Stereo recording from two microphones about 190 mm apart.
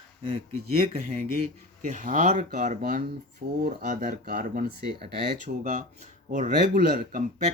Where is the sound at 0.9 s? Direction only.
30° right (ahead or behind); by 5.5 s 50° right (ahead or behind).